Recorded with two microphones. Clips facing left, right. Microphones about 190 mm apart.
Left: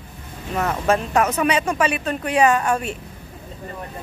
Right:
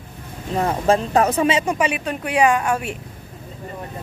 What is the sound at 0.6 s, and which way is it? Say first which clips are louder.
Speech: right 2 dB; 30° right (ahead or behind).